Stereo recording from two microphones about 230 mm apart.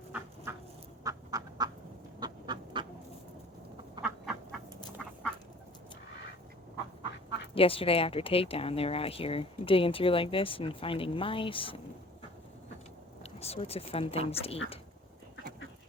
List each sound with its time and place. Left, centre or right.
0.1 s duck: centre
4.0 s duck: centre
7.5 s speech: left
13.2 s a woman's voice: left